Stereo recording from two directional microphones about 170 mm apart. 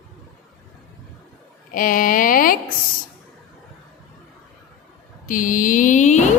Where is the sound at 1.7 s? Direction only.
55° left (ahead or behind).